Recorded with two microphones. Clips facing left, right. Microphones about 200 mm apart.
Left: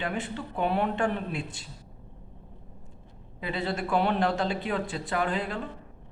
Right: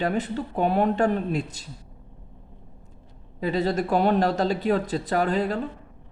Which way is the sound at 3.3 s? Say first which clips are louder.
Right 7 dB; 40° right (ahead or behind).